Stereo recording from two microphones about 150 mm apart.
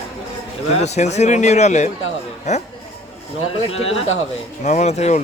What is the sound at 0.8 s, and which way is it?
Speech, 50° left (ahead or behind).